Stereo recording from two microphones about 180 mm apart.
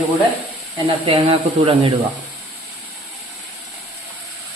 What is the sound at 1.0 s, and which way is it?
Speech, 30° right (ahead or behind).